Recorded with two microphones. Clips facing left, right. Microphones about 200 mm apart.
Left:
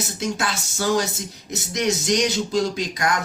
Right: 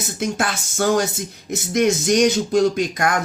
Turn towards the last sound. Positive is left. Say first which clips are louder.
# right 4 dB
turn(degrees=-55)  # may be behind; listen again after turning